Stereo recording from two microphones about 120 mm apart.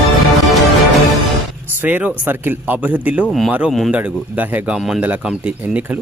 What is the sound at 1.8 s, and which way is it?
Speech, 15° right (ahead or behind).